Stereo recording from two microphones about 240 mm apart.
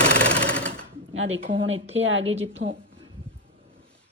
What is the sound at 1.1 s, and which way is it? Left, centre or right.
A woman's voice, right.